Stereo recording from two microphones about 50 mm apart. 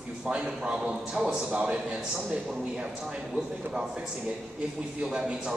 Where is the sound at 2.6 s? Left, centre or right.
Centre.